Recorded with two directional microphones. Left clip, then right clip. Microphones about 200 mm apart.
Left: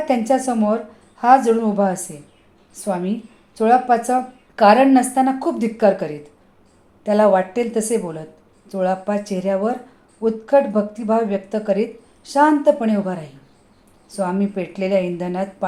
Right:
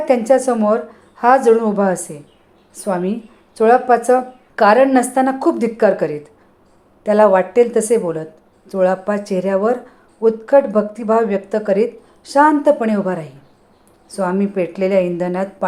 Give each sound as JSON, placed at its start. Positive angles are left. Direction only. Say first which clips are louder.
{"t": 0.0, "sound": "a woman's voice", "louder": "right 5 dB", "side_deg": -20}